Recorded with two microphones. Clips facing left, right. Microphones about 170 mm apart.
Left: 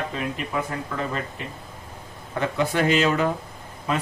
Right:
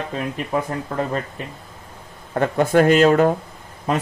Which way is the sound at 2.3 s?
50° right (ahead or behind).